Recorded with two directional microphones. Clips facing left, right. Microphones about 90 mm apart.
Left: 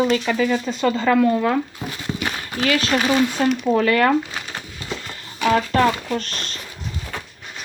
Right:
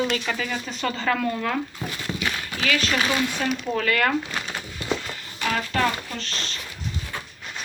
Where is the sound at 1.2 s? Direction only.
25° left (ahead or behind).